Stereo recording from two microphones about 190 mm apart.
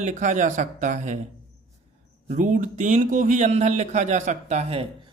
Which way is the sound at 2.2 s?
45° right (ahead or behind).